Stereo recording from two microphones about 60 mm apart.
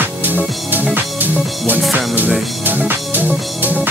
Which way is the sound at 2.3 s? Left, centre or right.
Centre.